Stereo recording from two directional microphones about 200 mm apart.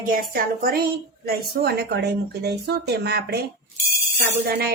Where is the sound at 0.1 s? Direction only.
45° right (ahead or behind).